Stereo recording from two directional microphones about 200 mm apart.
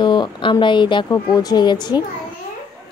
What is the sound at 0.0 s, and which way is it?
A woman's voice, 20° left (ahead or behind).